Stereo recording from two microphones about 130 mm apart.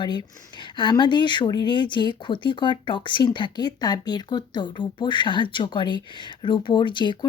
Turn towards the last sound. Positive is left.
turn(degrees=35)  # may be behind; listen again after turning